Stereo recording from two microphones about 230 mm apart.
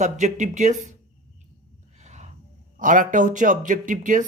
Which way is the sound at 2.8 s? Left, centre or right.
Right.